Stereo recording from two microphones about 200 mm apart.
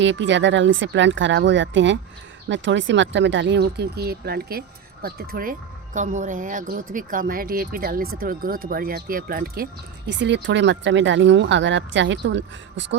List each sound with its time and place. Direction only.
0.0 s speech: 65° right (ahead or behind); by 9.6 s 45° right (ahead or behind)
10.1 s speech: 60° right (ahead or behind)